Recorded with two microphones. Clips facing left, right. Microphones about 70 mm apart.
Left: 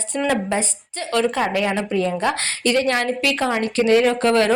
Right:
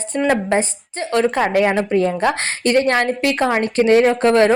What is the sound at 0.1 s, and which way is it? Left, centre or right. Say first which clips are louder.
Speech: right 3 dB; centre.